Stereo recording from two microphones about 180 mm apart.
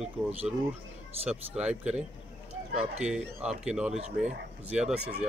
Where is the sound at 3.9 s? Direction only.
40° right (ahead or behind).